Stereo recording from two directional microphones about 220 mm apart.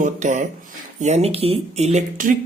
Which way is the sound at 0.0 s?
35° right (ahead or behind).